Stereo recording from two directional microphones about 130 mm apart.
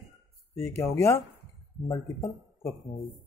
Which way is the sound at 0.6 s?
20° left (ahead or behind).